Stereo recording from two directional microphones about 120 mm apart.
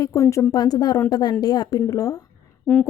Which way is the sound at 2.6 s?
10° left (ahead or behind).